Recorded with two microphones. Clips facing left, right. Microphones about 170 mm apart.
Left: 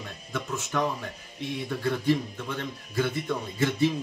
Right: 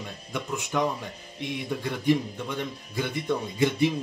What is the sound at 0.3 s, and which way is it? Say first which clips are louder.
Speech: right 1 dB; 15° right (ahead or behind).